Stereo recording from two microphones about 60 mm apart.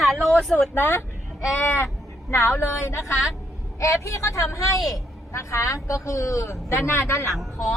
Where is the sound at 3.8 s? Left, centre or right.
Left.